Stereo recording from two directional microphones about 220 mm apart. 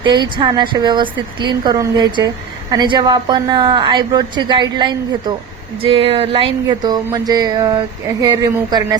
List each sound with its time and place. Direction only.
0.0 s a woman's voice: 20° right (ahead or behind)